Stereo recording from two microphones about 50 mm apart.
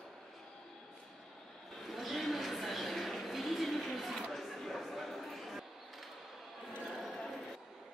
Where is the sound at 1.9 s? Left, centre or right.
Centre.